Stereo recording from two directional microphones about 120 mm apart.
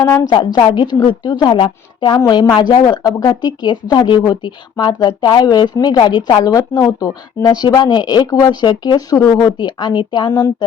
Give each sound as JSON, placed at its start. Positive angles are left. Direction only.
{"t": 0.3, "sound": "speech", "side_deg": 35}